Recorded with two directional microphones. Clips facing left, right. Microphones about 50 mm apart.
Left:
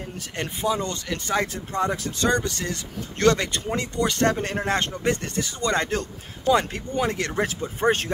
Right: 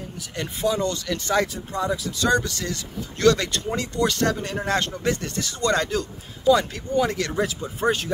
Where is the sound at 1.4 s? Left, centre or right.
Left.